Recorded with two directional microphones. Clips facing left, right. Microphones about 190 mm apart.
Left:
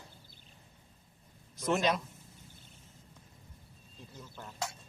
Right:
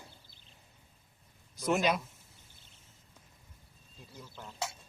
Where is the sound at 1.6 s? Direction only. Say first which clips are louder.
Right 1 dB; 5° right (ahead or behind).